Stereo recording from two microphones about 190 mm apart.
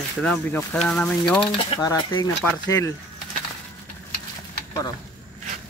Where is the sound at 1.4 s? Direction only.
25° left (ahead or behind).